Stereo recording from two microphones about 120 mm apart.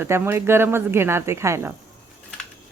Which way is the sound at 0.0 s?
20° right (ahead or behind).